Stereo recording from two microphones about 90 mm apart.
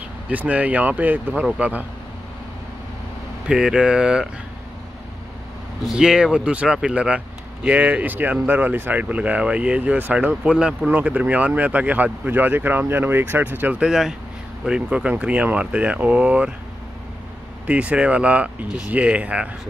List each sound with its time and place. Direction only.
0.3 s speech: 15° right (ahead or behind)
3.4 s speech: 5° right (ahead or behind)
5.9 s speech: 10° right (ahead or behind)
10.9 s speech: 15° right (ahead or behind)
17.6 s speech: 15° right (ahead or behind)